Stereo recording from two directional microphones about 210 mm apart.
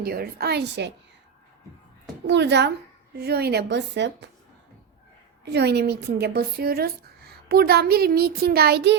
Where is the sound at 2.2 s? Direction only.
55° right (ahead or behind).